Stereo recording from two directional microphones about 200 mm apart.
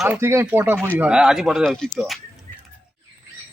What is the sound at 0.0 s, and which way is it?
Speech, 10° right (ahead or behind).